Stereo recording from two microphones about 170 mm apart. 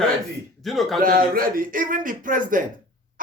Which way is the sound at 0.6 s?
Centre (ahead or behind).